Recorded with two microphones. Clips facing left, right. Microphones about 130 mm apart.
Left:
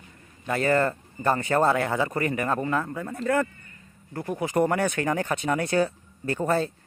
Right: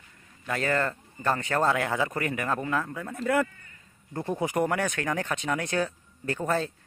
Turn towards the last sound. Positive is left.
turn(degrees=5)  # may be behind; listen again after turning